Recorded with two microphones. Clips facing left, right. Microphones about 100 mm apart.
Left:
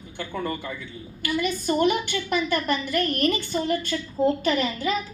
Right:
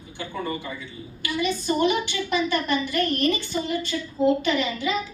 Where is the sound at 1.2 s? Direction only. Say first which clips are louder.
Even; 50° left (ahead or behind).